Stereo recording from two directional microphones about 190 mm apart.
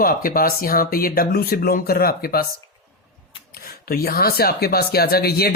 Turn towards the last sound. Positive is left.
turn(degrees=55)  # may be behind; listen again after turning